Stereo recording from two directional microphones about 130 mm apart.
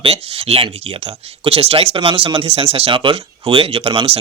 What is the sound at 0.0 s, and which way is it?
Speech, 50° right (ahead or behind).